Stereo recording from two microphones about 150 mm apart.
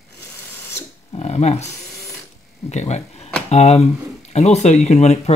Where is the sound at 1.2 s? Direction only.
45° left (ahead or behind).